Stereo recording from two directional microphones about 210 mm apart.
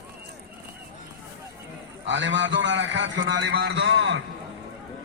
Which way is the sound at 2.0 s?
60° right (ahead or behind).